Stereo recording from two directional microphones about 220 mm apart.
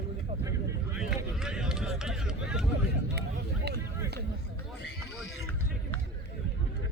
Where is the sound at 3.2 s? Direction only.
50° right (ahead or behind).